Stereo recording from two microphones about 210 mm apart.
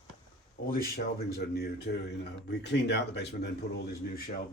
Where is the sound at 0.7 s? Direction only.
50° left (ahead or behind).